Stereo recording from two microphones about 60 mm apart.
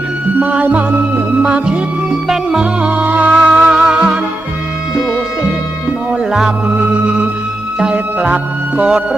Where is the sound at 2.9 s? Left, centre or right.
Right.